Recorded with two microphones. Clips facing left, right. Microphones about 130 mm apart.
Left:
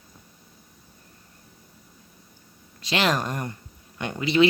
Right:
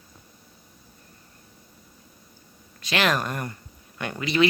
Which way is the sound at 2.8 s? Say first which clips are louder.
Even; 25° left (ahead or behind).